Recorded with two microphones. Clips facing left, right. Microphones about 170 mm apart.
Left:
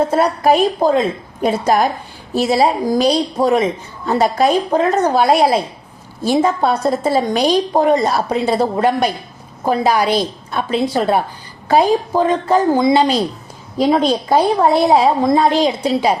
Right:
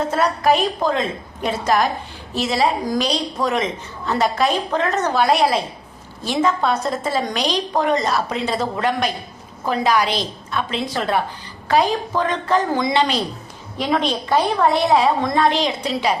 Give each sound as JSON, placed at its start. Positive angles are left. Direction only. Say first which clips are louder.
{"t": 0.1, "sound": "a woman's voice", "louder": "left 4 dB", "side_deg": 30}
{"t": 10.8, "sound": "a woman's voice", "louder": "left 6 dB", "side_deg": 35}